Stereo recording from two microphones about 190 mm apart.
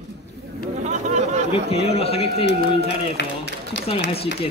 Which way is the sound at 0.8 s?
40° right (ahead or behind).